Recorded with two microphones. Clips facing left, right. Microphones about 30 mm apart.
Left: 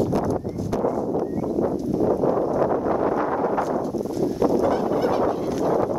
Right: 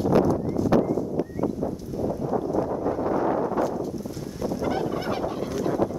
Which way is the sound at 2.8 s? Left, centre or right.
Left.